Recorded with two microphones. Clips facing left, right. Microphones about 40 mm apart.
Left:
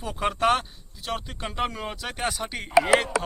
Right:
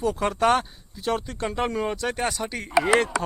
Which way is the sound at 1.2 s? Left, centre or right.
Centre.